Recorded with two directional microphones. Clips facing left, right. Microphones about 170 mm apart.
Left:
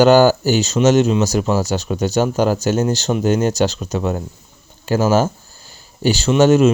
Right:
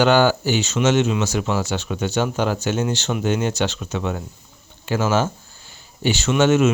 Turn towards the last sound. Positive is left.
turn(degrees=35)  # may be behind; listen again after turning